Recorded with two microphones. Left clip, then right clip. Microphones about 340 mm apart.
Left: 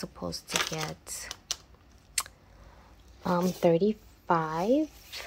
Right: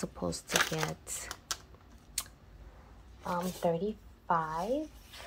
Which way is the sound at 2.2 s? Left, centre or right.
Centre.